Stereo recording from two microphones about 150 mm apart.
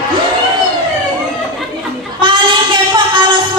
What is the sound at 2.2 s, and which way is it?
Child singing, 35° right (ahead or behind).